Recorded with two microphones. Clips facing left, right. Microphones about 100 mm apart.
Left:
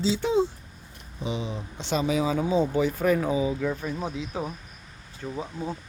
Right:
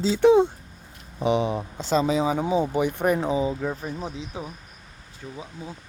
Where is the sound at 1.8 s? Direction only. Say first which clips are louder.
Right 3 dB; 35° right (ahead or behind).